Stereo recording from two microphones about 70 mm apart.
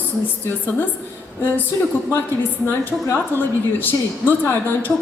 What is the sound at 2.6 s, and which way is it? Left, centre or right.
A woman's voice, left.